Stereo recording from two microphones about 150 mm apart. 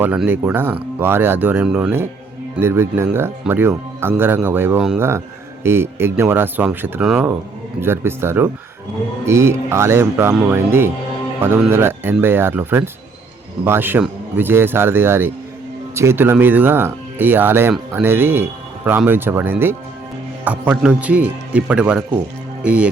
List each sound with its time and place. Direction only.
0.0 s speech: 10° right (ahead or behind)
2.6 s speech: 15° right (ahead or behind)
7.8 s speech: 15° right (ahead or behind)